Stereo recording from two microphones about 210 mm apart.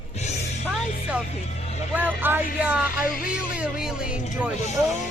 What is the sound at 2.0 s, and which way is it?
Speech, 10° right (ahead or behind).